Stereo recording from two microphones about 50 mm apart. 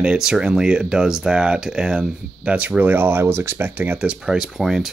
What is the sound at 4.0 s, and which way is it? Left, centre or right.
Speech, centre.